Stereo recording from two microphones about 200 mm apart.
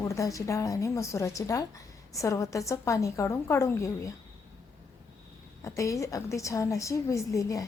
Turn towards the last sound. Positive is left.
turn(degrees=15)  # may be behind; listen again after turning